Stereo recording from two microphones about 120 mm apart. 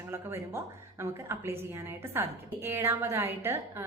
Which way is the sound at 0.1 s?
20° right (ahead or behind).